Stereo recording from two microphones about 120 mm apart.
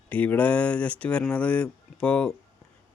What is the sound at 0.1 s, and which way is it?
Speech, 10° left (ahead or behind).